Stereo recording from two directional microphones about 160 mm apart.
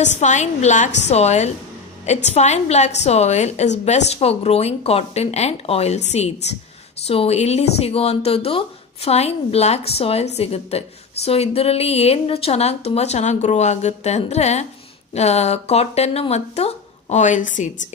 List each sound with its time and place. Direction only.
0.0 s a woman's voice: 45° left (ahead or behind)